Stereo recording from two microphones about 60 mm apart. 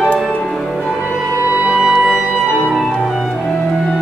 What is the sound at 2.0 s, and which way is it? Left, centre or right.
Music, centre.